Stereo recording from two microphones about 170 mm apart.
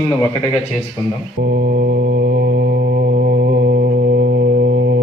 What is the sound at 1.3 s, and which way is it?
Mantra, 60° right (ahead or behind).